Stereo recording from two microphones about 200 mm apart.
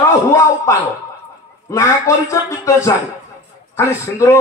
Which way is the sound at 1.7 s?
15° left (ahead or behind).